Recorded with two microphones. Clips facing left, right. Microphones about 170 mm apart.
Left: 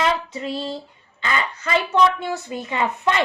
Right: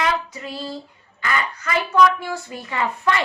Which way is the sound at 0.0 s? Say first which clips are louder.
Left 1 dB; 25° left (ahead or behind).